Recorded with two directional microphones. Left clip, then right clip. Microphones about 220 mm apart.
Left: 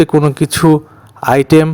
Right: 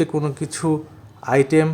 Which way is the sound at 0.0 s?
40° left (ahead or behind).